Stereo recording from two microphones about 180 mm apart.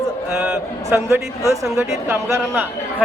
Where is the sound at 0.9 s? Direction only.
15° right (ahead or behind).